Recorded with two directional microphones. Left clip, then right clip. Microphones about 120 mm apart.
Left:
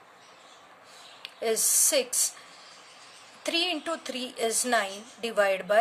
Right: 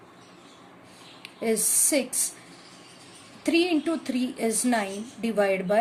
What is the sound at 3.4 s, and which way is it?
A woman's voice, 25° left (ahead or behind).